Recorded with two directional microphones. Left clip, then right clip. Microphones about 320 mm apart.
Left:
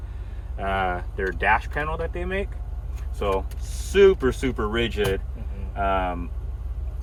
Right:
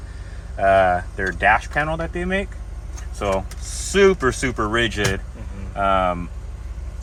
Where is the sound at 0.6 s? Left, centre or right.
Right.